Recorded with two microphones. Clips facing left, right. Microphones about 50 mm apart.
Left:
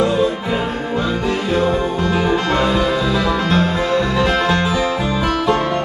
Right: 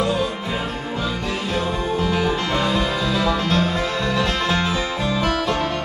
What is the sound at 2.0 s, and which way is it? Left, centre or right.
Music, centre.